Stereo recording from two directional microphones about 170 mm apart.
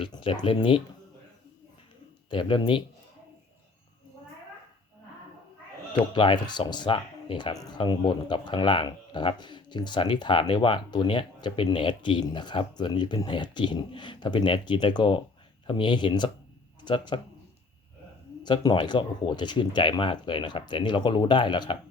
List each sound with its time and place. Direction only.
0.0 s speech: 30° left (ahead or behind)
2.3 s speech: 30° left (ahead or behind)
6.1 s speech: 25° left (ahead or behind)
18.4 s speech: 25° left (ahead or behind)